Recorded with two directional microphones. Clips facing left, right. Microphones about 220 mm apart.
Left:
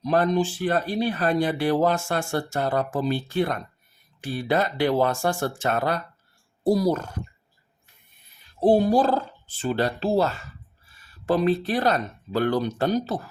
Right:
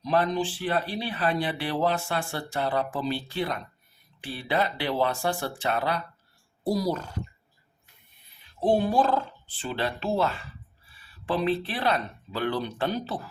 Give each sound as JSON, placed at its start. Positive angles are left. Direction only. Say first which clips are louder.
{"t": 0.0, "sound": "speech", "louder": "left 4 dB", "side_deg": 45}
{"t": 8.6, "sound": "speech", "louder": "left 4 dB", "side_deg": 40}